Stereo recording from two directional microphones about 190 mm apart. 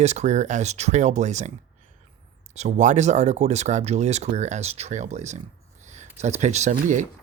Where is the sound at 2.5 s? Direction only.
40° right (ahead or behind).